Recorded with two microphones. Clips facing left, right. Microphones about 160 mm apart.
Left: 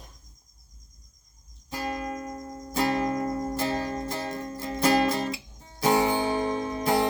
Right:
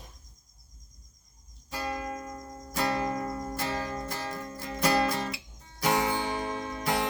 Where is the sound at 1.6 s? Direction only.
30° left (ahead or behind).